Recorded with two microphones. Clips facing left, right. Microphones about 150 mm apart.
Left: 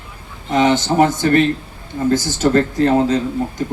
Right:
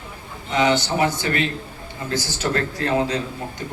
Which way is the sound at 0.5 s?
45° left (ahead or behind).